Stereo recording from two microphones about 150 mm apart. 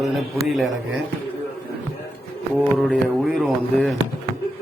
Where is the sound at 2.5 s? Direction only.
5° right (ahead or behind).